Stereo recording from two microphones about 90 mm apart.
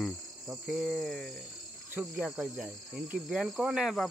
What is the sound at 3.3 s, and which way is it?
Speech, 5° right (ahead or behind).